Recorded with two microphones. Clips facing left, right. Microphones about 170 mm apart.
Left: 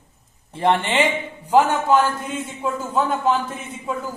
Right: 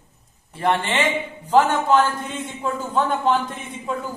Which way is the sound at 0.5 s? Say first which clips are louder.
Left 2 dB; 20° left (ahead or behind).